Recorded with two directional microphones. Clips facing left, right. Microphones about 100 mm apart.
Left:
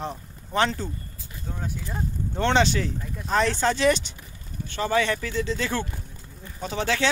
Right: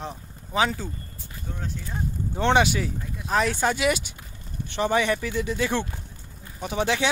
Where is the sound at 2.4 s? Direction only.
15° right (ahead or behind).